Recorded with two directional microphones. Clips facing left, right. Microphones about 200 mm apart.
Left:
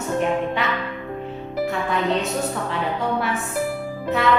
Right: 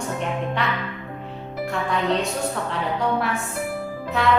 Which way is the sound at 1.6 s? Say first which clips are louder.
Left 1 dB; centre (ahead or behind).